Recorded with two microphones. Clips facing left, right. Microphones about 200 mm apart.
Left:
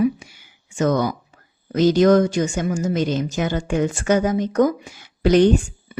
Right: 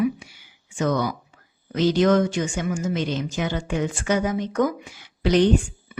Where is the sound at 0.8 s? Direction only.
45° left (ahead or behind).